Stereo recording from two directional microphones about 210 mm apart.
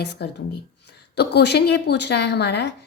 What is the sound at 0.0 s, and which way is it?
A woman's voice, 55° left (ahead or behind).